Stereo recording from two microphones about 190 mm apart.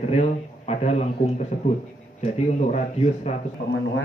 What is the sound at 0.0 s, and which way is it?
A man's voice, 35° left (ahead or behind).